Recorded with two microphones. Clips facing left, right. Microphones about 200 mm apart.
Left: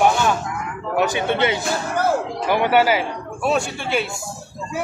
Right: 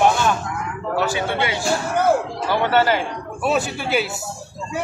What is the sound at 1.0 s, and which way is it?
A man's voice, 20° left (ahead or behind).